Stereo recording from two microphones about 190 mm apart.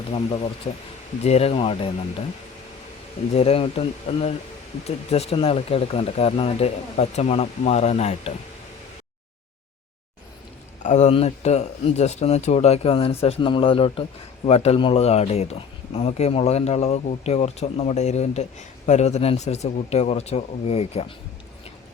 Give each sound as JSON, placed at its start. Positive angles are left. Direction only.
{"t": 0.1, "sound": "speech", "side_deg": 30}
{"t": 3.3, "sound": "speech", "side_deg": 30}
{"t": 10.8, "sound": "speech", "side_deg": 35}